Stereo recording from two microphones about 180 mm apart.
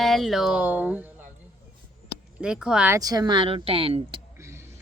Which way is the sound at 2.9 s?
20° right (ahead or behind).